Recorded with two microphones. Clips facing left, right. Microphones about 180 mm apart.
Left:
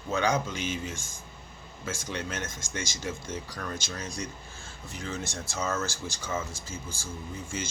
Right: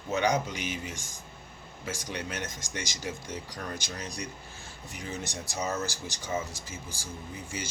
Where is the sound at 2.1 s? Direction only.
15° right (ahead or behind).